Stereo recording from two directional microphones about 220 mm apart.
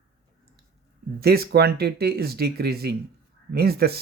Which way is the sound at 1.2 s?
45° right (ahead or behind).